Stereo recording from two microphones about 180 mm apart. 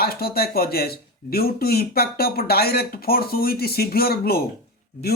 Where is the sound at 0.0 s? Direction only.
60° left (ahead or behind).